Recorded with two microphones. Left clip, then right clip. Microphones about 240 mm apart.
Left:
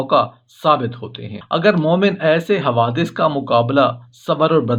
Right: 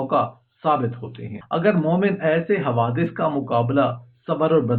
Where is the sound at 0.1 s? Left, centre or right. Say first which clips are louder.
Left 8 dB; left.